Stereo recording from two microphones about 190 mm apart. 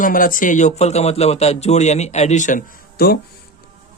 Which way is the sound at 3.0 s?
55° left (ahead or behind).